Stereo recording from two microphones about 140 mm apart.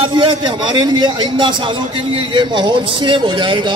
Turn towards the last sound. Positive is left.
turn(degrees=-35)  # may be behind; listen again after turning